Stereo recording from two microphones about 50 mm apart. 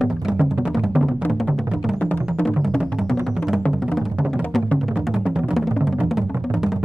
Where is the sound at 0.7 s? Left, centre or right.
Centre.